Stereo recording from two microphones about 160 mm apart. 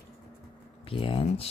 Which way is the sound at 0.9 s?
35° left (ahead or behind).